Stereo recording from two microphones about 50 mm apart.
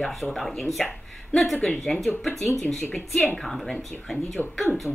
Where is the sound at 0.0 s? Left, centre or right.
Centre.